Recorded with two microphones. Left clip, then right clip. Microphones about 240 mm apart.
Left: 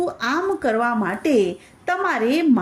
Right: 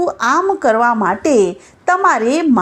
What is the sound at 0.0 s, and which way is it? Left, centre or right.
A woman's voice, right.